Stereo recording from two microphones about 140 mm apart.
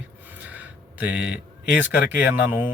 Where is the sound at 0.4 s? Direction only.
10° right (ahead or behind).